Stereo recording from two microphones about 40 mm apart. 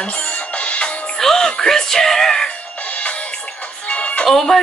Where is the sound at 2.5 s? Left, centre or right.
Left.